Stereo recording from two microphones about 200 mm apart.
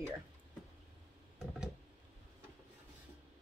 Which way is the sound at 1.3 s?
Centre (ahead or behind).